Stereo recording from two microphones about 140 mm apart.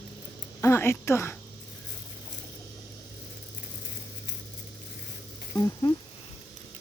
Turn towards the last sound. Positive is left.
turn(degrees=35)  # may be behind; listen again after turning